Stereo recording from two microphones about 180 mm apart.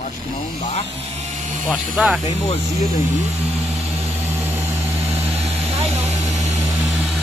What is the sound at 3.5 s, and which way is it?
Vehicle, 35° right (ahead or behind).